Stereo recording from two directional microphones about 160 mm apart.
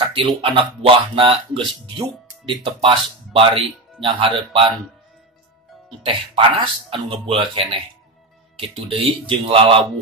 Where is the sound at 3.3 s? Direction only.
35° right (ahead or behind).